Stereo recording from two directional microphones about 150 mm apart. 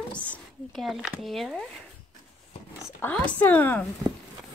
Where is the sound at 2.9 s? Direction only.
10° left (ahead or behind).